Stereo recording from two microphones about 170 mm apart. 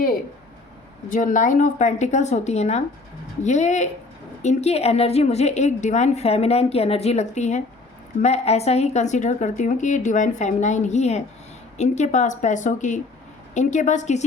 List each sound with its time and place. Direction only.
1.1 s a woman's voice: 50° left (ahead or behind)